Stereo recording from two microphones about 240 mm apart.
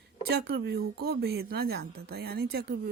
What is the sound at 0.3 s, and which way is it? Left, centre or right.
A woman's voice, right.